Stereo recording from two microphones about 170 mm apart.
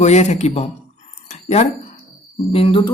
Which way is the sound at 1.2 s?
45° left (ahead or behind).